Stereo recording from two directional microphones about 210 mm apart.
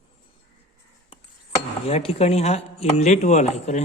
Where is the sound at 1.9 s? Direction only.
30° left (ahead or behind).